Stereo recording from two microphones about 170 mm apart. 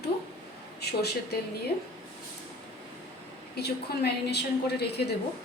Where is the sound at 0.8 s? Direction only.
70° left (ahead or behind).